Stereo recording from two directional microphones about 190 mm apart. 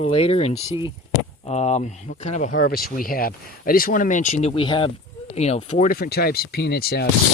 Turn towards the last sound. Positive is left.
turn(degrees=55)  # may be behind; listen again after turning